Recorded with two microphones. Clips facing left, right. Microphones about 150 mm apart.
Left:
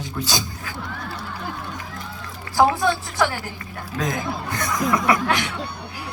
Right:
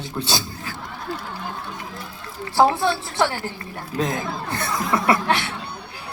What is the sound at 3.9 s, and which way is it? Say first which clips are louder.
A woman's voice: right 1 dB; 25° right (ahead or behind).